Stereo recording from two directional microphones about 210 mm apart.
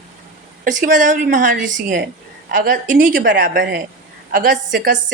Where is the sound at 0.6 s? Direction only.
40° right (ahead or behind).